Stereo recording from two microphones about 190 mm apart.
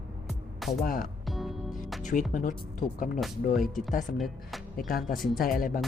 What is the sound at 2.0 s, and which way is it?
Speech, 40° left (ahead or behind).